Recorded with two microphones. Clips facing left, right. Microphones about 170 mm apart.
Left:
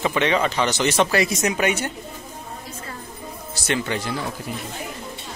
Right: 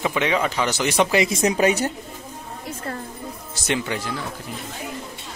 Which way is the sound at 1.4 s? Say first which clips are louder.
Right 3 dB; 35° right (ahead or behind).